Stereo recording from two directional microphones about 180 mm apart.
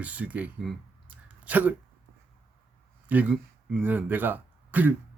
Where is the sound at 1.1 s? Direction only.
10° right (ahead or behind).